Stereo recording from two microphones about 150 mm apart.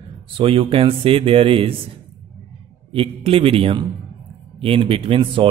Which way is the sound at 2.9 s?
40° right (ahead or behind).